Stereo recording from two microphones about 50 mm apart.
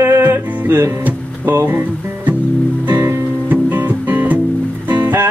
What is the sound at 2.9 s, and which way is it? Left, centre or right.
Music, right.